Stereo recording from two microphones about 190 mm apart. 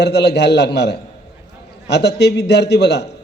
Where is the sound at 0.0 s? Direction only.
65° left (ahead or behind).